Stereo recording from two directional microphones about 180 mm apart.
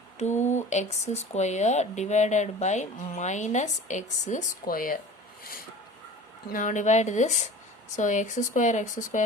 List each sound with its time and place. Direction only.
0.2 s speech: 40° left (ahead or behind)
5.4 s a sound: 55° left (ahead or behind)
6.5 s speech: 45° left (ahead or behind)